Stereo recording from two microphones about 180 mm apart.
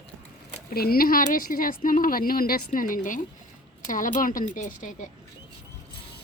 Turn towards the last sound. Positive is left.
turn(degrees=45)  # may be behind; listen again after turning